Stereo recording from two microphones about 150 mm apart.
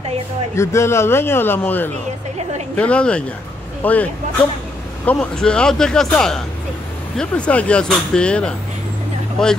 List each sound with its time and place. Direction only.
0.6 s speech: 20° left (ahead or behind)